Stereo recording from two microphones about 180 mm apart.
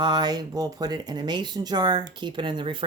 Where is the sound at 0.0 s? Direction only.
25° right (ahead or behind).